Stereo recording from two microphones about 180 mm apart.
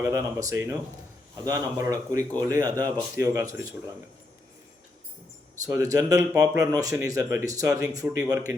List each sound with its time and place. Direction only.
0.0 s speech: 15° right (ahead or behind)
5.6 s speech: 15° right (ahead or behind)